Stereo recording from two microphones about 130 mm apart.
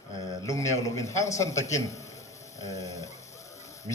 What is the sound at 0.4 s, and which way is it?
A man's voice, 25° left (ahead or behind).